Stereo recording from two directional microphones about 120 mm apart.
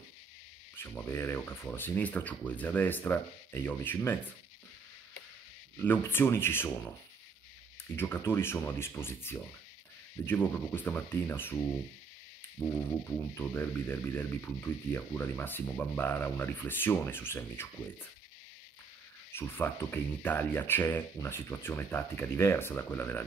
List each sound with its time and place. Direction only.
0.8 s speech: 15° left (ahead or behind)
5.8 s speech: 15° left (ahead or behind)
7.9 s speech: 20° left (ahead or behind)
12.5 s speech: 15° left (ahead or behind)
19.3 s speech: 20° left (ahead or behind)